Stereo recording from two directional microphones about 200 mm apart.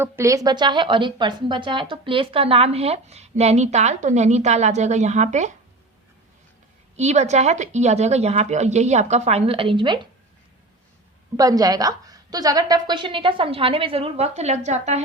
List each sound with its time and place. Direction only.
0.0 s a woman's voice: 15° right (ahead or behind); by 5.5 s 35° right (ahead or behind)
6.9 s a woman's voice: 35° right (ahead or behind)
11.3 s a woman's voice: 20° right (ahead or behind); by 15.0 s 35° right (ahead or behind)